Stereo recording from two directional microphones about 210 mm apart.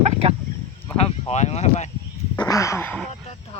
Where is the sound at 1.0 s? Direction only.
30° left (ahead or behind).